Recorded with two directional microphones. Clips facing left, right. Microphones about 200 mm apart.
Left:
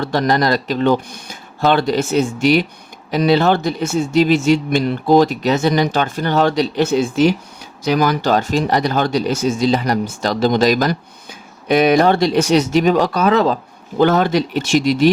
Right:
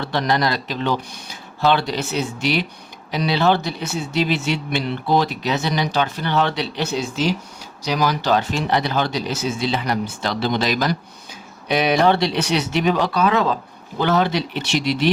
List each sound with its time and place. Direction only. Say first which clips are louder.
0.0 s speech: left 4 dB; 45° left (ahead or behind)